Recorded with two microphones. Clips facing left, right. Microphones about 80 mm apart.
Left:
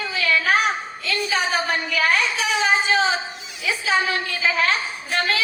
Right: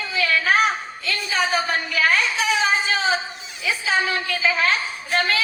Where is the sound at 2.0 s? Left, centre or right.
Left.